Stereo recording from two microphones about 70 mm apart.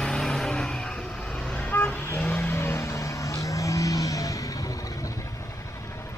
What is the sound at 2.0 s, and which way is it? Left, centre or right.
Vehicle, left.